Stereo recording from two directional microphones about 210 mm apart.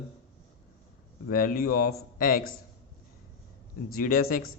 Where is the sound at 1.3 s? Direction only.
40° left (ahead or behind).